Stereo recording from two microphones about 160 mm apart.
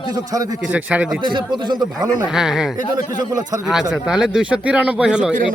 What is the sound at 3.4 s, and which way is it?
Speech, 25° right (ahead or behind).